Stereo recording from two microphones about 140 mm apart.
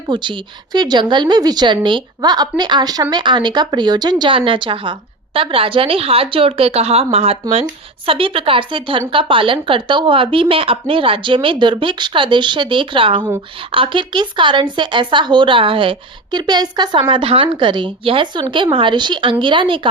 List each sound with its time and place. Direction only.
0.1 s a woman's voice: 35° right (ahead or behind)